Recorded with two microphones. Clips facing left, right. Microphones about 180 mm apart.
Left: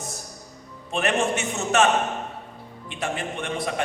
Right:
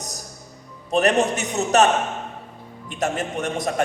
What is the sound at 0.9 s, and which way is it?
A man's voice, 40° right (ahead or behind).